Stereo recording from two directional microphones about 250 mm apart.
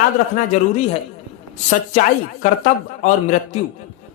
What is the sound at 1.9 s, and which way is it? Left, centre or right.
A woman's voice, left.